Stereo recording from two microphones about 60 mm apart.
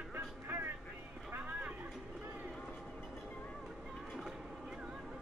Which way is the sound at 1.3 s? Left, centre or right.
Right.